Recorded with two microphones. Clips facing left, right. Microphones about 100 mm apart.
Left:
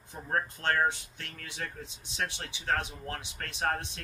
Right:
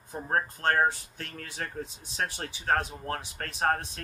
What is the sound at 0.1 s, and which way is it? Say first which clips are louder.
Speech: right 3 dB; 40° right (ahead or behind).